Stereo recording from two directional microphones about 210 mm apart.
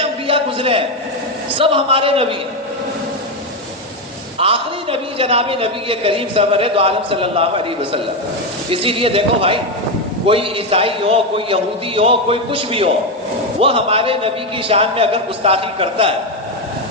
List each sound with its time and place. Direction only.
0.3 s a sound: 25° right (ahead or behind)
1.5 s a man's voice: 25° right (ahead or behind)
4.4 s a man's voice: 25° right (ahead or behind)